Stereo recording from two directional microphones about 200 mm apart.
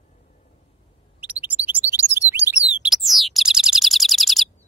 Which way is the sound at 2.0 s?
10° right (ahead or behind).